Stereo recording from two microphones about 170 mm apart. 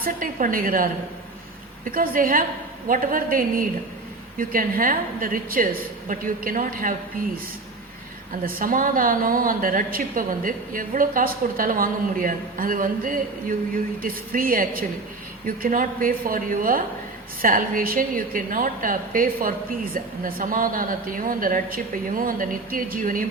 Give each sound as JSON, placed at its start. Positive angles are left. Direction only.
{"t": 0.0, "sound": "a woman's voice", "side_deg": -55}
{"t": 8.4, "sound": "a woman's voice", "side_deg": -55}